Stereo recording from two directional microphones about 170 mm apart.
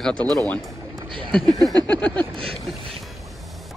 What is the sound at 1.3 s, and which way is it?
Speech, centre (ahead or behind).